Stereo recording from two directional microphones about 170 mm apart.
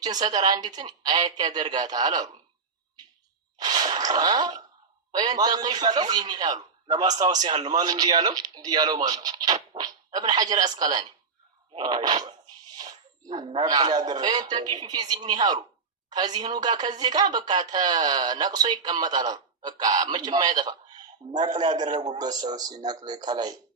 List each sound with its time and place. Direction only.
0.0 s a woman's voice: 25° right (ahead or behind)
3.6 s a woman's voice: 25° right (ahead or behind)